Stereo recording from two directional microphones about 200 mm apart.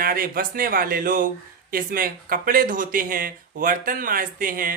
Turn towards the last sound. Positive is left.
turn(degrees=-45)  # may be behind; listen again after turning